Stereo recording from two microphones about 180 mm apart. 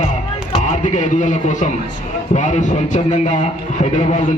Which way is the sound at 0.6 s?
45° left (ahead or behind).